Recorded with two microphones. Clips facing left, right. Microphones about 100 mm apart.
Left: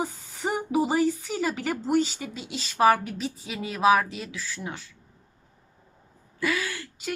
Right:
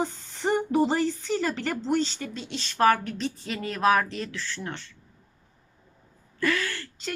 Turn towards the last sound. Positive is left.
turn(degrees=10)  # may be behind; listen again after turning